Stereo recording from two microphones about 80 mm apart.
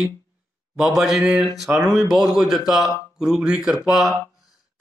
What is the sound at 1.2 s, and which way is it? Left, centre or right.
Speech, centre.